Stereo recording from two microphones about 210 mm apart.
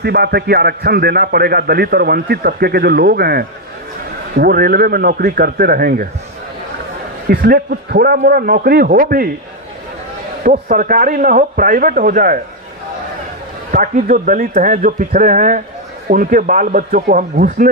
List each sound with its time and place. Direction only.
0.0 s a man's voice: 50° right (ahead or behind)
7.2 s a man's voice: 50° right (ahead or behind)
10.4 s a man's voice: 40° right (ahead or behind)
13.7 s a man's voice: 40° right (ahead or behind)